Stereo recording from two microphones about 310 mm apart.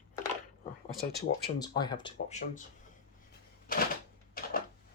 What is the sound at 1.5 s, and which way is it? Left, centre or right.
Speech, centre.